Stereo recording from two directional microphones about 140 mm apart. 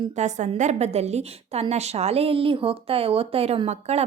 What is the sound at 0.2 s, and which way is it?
A woman's voice, 60° right (ahead or behind).